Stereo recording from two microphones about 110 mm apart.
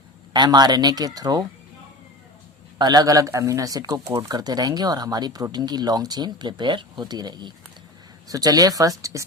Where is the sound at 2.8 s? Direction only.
35° right (ahead or behind).